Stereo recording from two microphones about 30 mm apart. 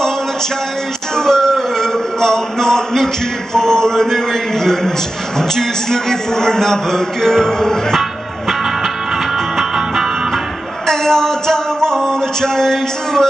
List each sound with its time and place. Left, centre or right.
1.1 s music: centre
3.5 s a man's voice: centre
10.9 s music: centre